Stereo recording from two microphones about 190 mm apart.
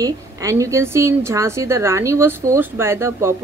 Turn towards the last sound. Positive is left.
turn(degrees=-15)  # may be behind; listen again after turning